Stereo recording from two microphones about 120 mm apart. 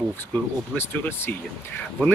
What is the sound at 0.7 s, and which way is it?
Speech, 20° left (ahead or behind).